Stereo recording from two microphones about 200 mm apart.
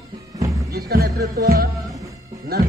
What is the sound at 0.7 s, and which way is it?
Speech, 55° right (ahead or behind).